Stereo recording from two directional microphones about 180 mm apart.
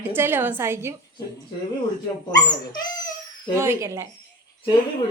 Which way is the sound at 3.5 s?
15° right (ahead or behind).